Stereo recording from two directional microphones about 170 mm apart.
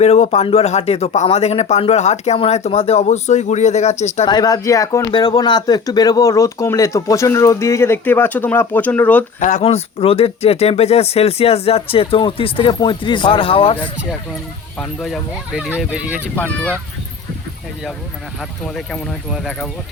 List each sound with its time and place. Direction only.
0.0 s speech: 40° left (ahead or behind)
4.3 s speech: 25° left (ahead or behind)
9.4 s speech: 45° left (ahead or behind)
14.8 s speech: centre (ahead or behind)
18.7 s speech: centre (ahead or behind)